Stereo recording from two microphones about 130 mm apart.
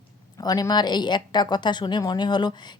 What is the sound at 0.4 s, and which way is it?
Speech, 30° left (ahead or behind).